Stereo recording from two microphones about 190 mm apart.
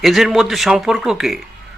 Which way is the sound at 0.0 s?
Centre (ahead or behind).